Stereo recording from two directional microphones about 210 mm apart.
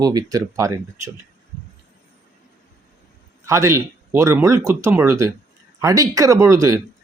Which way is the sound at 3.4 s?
15° right (ahead or behind).